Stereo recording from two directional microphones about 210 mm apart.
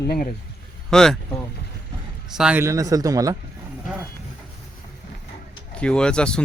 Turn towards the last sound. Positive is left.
turn(degrees=5)  # may be behind; listen again after turning